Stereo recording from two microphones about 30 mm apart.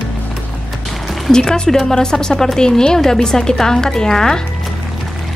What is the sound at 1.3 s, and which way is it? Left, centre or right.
A woman's voice, left.